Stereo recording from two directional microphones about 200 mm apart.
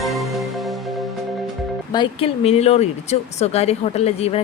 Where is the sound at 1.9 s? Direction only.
25° left (ahead or behind).